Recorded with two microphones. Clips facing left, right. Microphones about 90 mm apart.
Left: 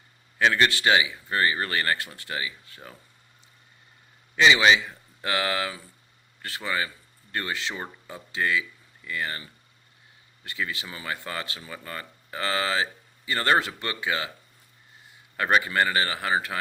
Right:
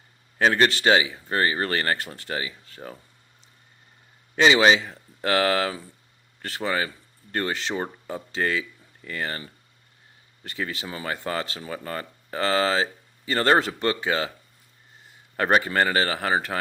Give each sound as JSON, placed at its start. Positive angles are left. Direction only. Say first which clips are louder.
{"t": 0.3, "sound": "speech", "louder": "right 2 dB", "side_deg": -40}
{"t": 4.4, "sound": "speech", "louder": "right 2 dB", "side_deg": -40}
{"t": 15.4, "sound": "speech", "louder": "right 2 dB", "side_deg": -40}